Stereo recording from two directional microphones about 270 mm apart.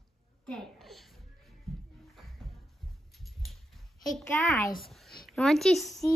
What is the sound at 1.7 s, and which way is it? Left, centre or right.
Music, centre.